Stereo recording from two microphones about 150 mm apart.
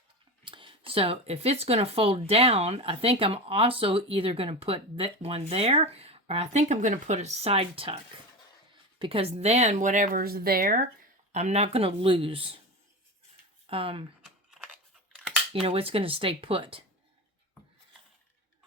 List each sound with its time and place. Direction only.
0.4 s speech: 35° right (ahead or behind); by 10.8 s 75° right (ahead or behind)
11.3 s speech: 50° right (ahead or behind)
13.7 s speech: 40° right (ahead or behind)
15.6 s speech: 40° right (ahead or behind)